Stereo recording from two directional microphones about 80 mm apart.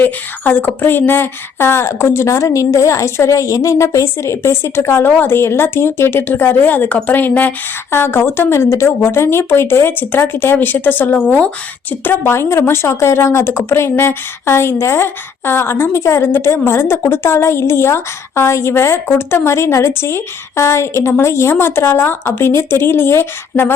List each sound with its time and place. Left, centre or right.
0.0 s speech: left